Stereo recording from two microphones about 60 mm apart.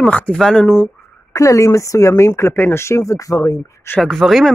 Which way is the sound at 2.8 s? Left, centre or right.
Left.